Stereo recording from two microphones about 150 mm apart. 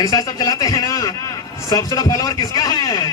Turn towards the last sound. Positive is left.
turn(degrees=25)  # may be behind; listen again after turning